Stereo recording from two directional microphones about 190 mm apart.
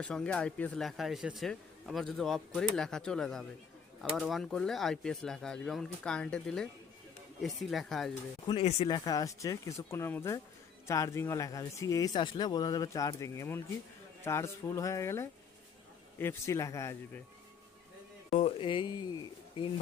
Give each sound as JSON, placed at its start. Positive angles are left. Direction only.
{"t": 0.0, "sound": "speech", "side_deg": 5}
{"t": 8.4, "sound": "speech", "side_deg": 30}
{"t": 18.3, "sound": "speech", "side_deg": 30}